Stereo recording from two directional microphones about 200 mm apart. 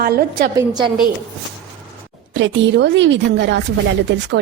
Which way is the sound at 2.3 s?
65° right (ahead or behind).